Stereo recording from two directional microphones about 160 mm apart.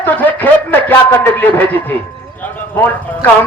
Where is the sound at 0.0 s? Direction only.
10° left (ahead or behind).